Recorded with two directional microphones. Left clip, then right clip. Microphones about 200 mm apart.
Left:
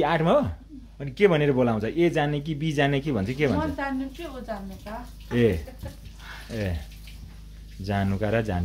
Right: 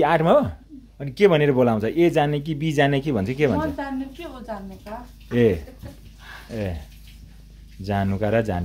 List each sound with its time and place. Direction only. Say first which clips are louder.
0.0 s speech: right 5 dB; 20° right (ahead or behind)
3.7 s a woman's voice: even; 5° right (ahead or behind)
5.3 s speech: right 4 dB; 15° right (ahead or behind)
7.8 s speech: right 3 dB; 20° right (ahead or behind)